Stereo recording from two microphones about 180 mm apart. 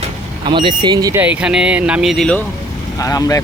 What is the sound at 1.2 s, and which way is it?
Speech, 5° right (ahead or behind).